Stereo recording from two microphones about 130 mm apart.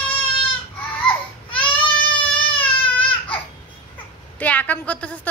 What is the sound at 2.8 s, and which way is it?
Baby cry, 40° left (ahead or behind).